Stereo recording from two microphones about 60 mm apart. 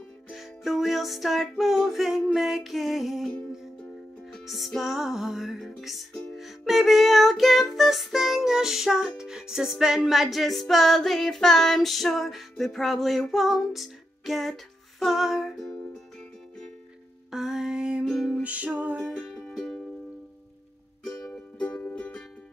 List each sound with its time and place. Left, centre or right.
0.3 s music: centre
4.3 s music: centre
17.3 s music: centre; by 19.0 s right
19.5 s music: centre
21.3 s music: left
21.7 s music: left